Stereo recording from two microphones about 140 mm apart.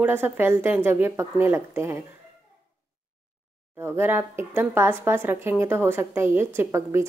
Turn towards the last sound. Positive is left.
turn(degrees=-20)  # may be behind; listen again after turning